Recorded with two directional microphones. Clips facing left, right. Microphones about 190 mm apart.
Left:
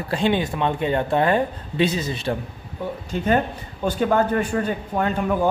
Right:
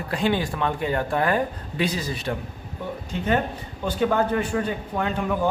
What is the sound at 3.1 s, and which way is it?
Speech, 40° left (ahead or behind).